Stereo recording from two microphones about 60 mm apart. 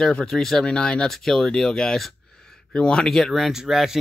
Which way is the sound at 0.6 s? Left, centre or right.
Centre.